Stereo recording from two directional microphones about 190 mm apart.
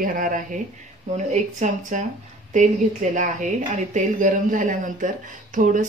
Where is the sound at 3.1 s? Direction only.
40° right (ahead or behind).